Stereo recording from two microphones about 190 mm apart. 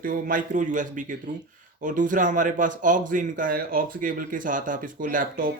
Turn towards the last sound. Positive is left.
turn(degrees=-45)  # may be behind; listen again after turning